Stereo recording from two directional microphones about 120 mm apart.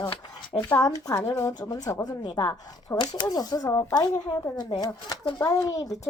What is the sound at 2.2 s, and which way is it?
Speech, 40° left (ahead or behind).